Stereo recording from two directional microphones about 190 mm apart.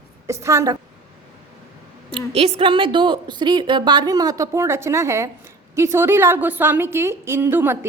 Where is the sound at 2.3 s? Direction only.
30° right (ahead or behind).